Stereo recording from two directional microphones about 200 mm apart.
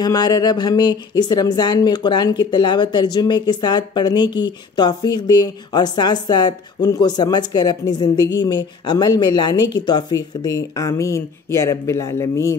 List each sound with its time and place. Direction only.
0.0 s speech: 20° left (ahead or behind)